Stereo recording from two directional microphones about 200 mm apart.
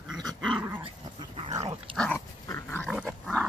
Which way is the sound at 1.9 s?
5° left (ahead or behind).